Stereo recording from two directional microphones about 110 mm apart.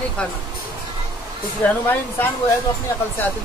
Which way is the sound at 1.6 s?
15° left (ahead or behind).